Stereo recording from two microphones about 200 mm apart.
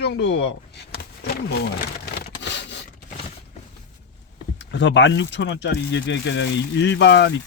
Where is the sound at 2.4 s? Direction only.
60° left (ahead or behind).